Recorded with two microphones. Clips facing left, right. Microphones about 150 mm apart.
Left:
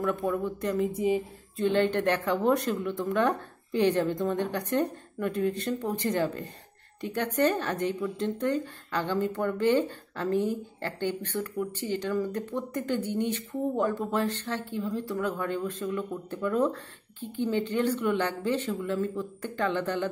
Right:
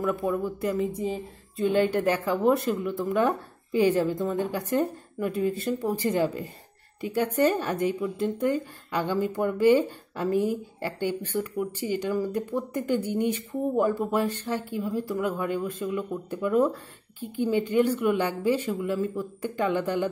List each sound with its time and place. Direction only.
0.0 s a woman's voice: 5° right (ahead or behind)